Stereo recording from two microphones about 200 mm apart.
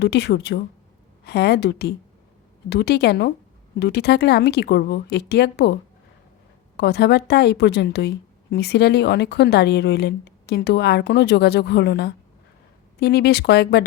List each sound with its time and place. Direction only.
0.0 s a woman's voice: 55° left (ahead or behind)
6.7 s a woman's voice: 55° left (ahead or behind)